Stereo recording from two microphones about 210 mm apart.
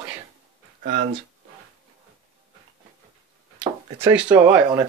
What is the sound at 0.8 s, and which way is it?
Speech, 40° right (ahead or behind).